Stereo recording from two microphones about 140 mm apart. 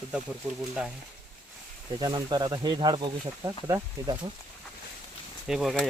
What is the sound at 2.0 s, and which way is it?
Speech, 30° right (ahead or behind).